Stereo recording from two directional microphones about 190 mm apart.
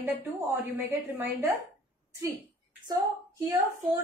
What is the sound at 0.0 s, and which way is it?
A woman's voice, 10° right (ahead or behind).